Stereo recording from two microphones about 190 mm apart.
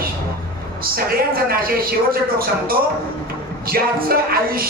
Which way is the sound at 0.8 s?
50° right (ahead or behind).